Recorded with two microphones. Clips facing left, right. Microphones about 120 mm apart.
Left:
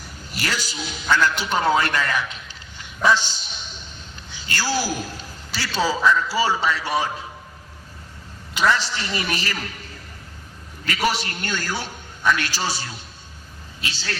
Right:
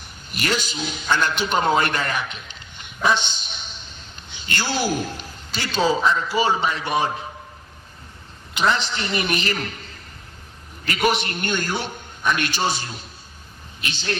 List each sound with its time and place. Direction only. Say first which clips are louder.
0.0 s a man's voice: right 1 dB; 20° right (ahead or behind)
8.5 s a man's voice: left 1 dB; 20° right (ahead or behind)
10.9 s a man's voice: right 2 dB; 20° right (ahead or behind)